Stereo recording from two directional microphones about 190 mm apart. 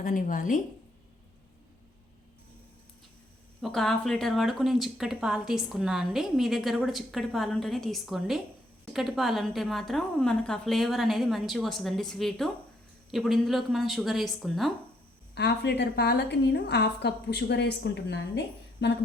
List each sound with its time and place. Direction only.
0.0 s a woman's voice: 45° left (ahead or behind)
3.6 s speech: centre (ahead or behind)
15.4 s a woman's voice: 60° left (ahead or behind)